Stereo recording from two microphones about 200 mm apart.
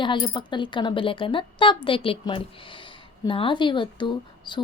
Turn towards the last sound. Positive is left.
turn(degrees=25)  # may be behind; listen again after turning